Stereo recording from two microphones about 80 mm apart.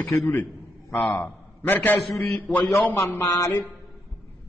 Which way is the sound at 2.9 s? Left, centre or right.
Left.